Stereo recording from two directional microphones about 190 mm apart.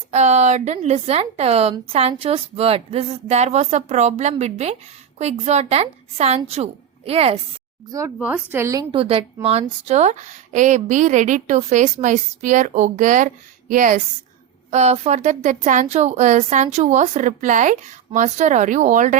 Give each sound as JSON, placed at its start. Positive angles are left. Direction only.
{"t": 0.1, "sound": "a woman's voice", "side_deg": -35}
{"t": 7.9, "sound": "a woman's voice", "side_deg": -15}